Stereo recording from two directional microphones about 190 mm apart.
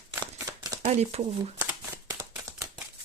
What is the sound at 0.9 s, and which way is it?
Speech, 35° right (ahead or behind).